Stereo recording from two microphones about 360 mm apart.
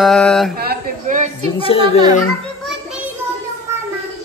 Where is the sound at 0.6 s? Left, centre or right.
Right.